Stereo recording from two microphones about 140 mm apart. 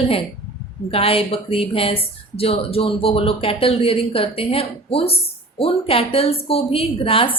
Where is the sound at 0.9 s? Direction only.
45° left (ahead or behind).